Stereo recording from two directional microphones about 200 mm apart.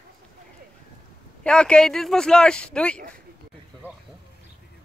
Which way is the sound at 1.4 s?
5° left (ahead or behind).